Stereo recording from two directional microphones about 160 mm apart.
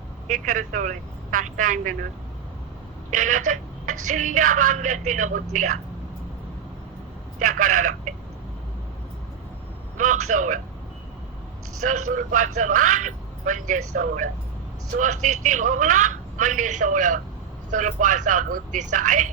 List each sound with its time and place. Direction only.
0.3 s a woman's voice: 55° right (ahead or behind)
3.1 s a woman's voice: 55° right (ahead or behind)
7.3 s a woman's voice: 55° right (ahead or behind)
10.0 s a woman's voice: 50° right (ahead or behind)
11.8 s a woman's voice: 55° right (ahead or behind)